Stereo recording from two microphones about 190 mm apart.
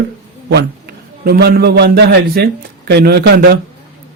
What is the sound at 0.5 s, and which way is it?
A man's voice, 55° right (ahead or behind).